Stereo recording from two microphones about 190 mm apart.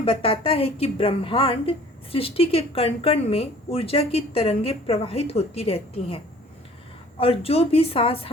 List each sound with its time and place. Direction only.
0.0 s a woman's voice: 30° left (ahead or behind)
7.2 s a woman's voice: 30° left (ahead or behind)